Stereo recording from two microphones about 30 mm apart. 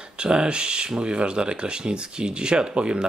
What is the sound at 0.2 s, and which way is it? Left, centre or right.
Speech, right.